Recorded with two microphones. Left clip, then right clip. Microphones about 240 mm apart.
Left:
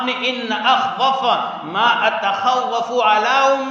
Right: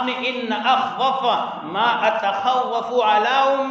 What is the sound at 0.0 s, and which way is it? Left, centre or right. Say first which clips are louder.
A man's voice: left 2 dB; left.